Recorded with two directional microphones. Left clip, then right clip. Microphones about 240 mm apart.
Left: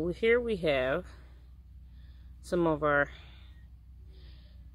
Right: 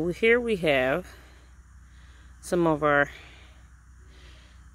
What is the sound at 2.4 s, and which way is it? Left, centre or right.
Speech, right.